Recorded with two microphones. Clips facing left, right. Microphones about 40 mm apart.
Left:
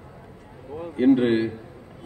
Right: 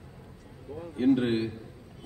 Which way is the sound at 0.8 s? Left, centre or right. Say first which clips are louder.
Left 6 dB; left.